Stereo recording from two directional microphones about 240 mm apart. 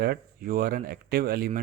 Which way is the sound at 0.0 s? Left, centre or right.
Right.